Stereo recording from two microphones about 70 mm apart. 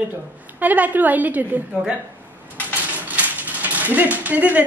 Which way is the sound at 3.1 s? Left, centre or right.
Right.